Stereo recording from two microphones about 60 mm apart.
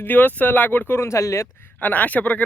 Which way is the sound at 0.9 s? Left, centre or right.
Left.